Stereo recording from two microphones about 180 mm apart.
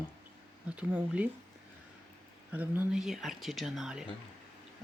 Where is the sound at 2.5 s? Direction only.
10° right (ahead or behind).